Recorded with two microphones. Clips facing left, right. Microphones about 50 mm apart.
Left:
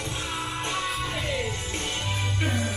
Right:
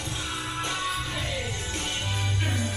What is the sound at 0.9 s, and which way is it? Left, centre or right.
Music, left.